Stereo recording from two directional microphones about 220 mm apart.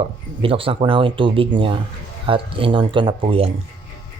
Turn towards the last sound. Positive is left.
turn(degrees=-25)  # may be behind; listen again after turning